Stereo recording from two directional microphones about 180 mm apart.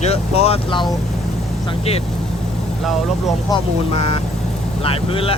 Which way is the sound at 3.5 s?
30° left (ahead or behind).